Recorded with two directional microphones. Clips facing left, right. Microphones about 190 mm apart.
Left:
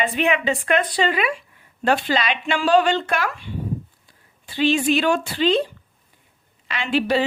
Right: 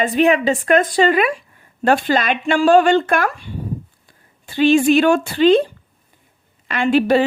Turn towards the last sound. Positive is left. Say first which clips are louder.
# right 6 dB
turn(degrees=-50)  # may be behind; listen again after turning